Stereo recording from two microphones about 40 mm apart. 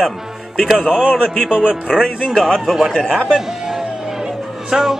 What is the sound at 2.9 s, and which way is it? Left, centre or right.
Speech, left.